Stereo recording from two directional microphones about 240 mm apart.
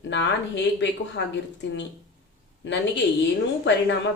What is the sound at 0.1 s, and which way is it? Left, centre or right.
Speech, left.